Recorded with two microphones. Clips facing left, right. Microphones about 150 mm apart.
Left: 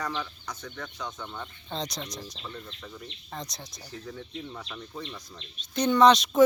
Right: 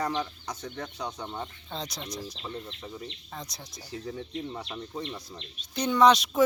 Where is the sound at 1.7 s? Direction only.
5° right (ahead or behind).